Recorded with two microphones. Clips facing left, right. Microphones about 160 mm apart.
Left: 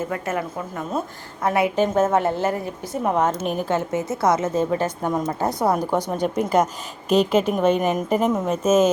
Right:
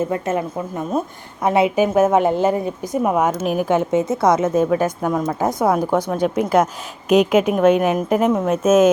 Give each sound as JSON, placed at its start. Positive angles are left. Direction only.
{"t": 0.1, "sound": "a woman's voice", "side_deg": -25}
{"t": 1.7, "sound": "a woman's voice", "side_deg": -10}
{"t": 5.8, "sound": "a woman's voice", "side_deg": 15}
{"t": 6.2, "sound": "a woman's voice", "side_deg": -5}